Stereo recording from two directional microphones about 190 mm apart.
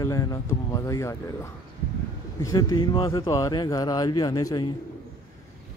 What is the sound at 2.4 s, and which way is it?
Speech, 15° left (ahead or behind).